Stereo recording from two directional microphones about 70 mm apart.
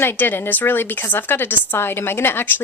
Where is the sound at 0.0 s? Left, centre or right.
Left.